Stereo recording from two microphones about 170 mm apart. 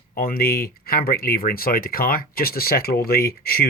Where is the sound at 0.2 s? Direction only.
60° left (ahead or behind).